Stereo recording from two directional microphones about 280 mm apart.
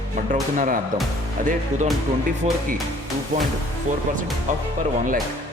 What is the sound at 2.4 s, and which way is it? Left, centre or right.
Speech, right.